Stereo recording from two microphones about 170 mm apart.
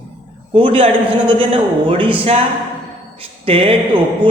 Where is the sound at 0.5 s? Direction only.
35° right (ahead or behind).